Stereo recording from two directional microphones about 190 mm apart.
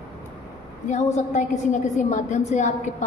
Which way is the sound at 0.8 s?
40° left (ahead or behind).